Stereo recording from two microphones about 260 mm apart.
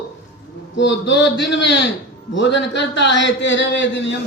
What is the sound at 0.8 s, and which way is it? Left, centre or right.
A man's voice, left.